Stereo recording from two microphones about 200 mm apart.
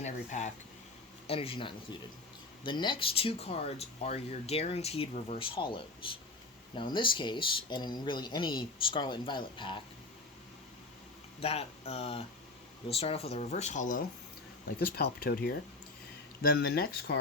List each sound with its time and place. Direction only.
0.0 s speech: 35° left (ahead or behind)
11.3 s speech: 30° left (ahead or behind)
14.8 s speech: 50° left (ahead or behind)